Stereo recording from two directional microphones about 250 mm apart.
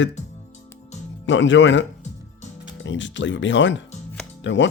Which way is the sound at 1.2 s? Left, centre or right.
Left.